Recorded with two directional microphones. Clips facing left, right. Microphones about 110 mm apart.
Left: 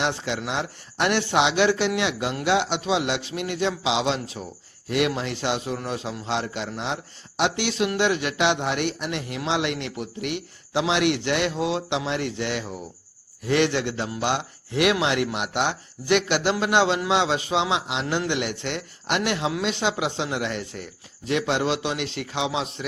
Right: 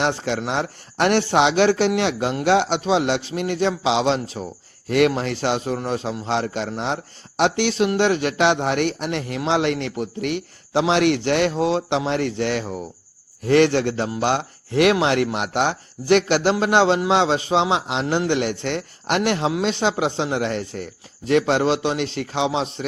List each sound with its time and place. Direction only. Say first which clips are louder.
0.0 s a man's voice: right 4 dB; 40° right (ahead or behind)
4.9 s a man's voice: right 6 dB; 50° right (ahead or behind); by 22.9 s 30° right (ahead or behind)